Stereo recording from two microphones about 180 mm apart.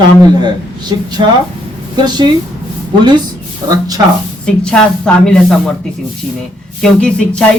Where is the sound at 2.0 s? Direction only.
25° right (ahead or behind).